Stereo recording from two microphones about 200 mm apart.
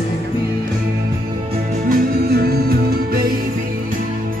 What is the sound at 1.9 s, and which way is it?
Music, 50° right (ahead or behind).